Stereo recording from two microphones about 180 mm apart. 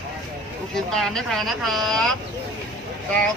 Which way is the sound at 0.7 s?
5° left (ahead or behind).